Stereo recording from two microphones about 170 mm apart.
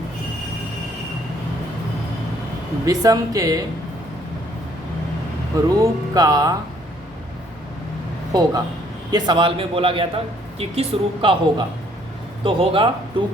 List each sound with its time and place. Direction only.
2.8 s speech: 20° right (ahead or behind)
5.6 s speech: 20° right (ahead or behind)
8.3 s a woman's voice: 20° right (ahead or behind)